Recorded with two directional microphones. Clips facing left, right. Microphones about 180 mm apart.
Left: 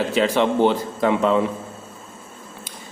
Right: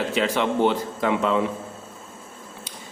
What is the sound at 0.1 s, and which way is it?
A man's voice, 35° left (ahead or behind).